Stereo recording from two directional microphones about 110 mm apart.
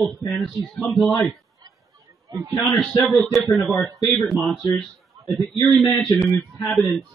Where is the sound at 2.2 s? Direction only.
30° right (ahead or behind).